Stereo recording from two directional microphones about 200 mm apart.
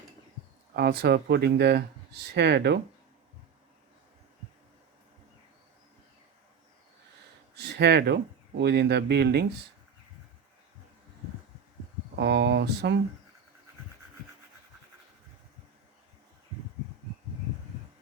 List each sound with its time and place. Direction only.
0.8 s speech: 55° right (ahead or behind)
7.5 s speech: 55° right (ahead or behind)
12.1 s speech: 60° right (ahead or behind)